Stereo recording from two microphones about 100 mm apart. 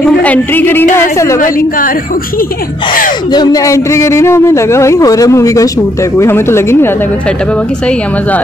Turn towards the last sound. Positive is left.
turn(degrees=25)  # may be behind; listen again after turning